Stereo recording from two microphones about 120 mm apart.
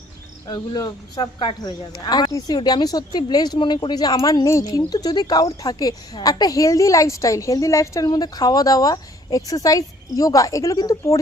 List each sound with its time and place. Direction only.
0.4 s a woman's voice: 35° left (ahead or behind)